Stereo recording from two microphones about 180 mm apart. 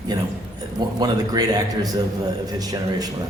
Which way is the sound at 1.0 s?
20° right (ahead or behind).